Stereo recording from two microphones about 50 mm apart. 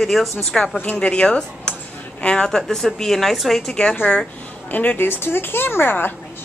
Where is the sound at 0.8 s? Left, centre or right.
Left; by 3.7 s centre.